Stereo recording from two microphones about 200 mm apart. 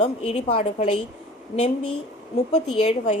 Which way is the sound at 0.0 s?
30° left (ahead or behind).